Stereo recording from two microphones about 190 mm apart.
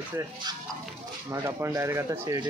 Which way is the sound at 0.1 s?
15° right (ahead or behind).